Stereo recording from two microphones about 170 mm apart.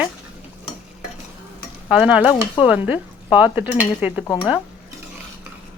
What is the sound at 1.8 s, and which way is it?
Stir, 5° right (ahead or behind).